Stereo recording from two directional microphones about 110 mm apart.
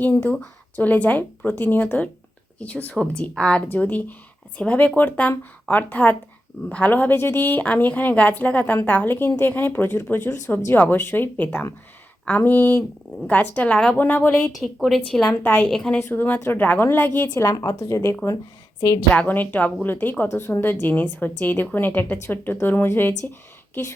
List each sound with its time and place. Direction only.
0.0 s a woman's voice: 15° left (ahead or behind)
14.3 s speech: centre (ahead or behind)
15.3 s a woman's voice: 20° left (ahead or behind)
15.6 s a woman's voice: 5° left (ahead or behind)
16.0 s a woman's voice: 20° left (ahead or behind)
19.1 s a woman's voice: 15° left (ahead or behind)